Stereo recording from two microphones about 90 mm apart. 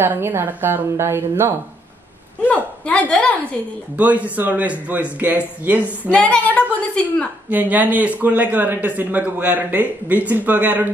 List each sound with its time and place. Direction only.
0.0 s a man's voice: 25° right (ahead or behind)
2.4 s a sound: 20° left (ahead or behind)
3.1 s a woman's voice: 15° left (ahead or behind)
3.9 s speech: 15° right (ahead or behind)
6.1 s a woman's voice: 15° left (ahead or behind)
7.4 s a man's voice: 20° right (ahead or behind)